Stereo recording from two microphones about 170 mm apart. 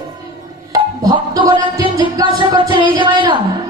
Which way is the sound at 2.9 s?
30° right (ahead or behind).